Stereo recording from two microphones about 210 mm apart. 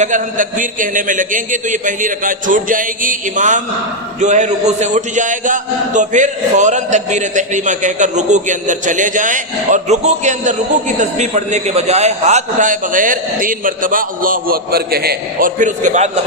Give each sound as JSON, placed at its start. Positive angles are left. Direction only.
{"t": 0.0, "sound": "a man's voice", "side_deg": -40}